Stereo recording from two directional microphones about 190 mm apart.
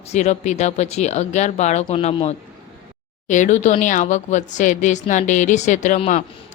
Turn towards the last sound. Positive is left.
turn(degrees=35)  # may be behind; listen again after turning